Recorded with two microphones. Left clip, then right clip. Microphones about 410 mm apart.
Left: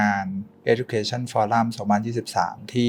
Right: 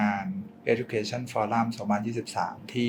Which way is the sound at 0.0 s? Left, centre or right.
Left.